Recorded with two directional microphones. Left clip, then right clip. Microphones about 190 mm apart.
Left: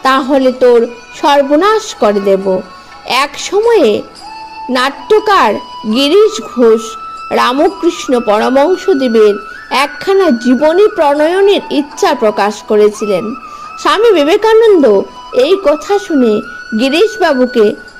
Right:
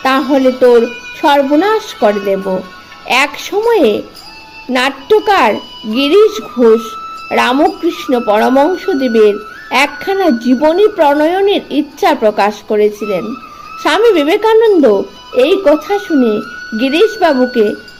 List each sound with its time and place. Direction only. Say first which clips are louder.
0.0 s speech: left 1 dB; 30° left (ahead or behind)